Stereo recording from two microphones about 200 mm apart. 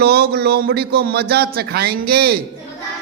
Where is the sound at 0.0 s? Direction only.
50° right (ahead or behind).